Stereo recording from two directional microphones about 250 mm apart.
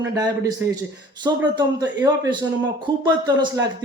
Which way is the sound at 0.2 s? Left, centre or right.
Centre.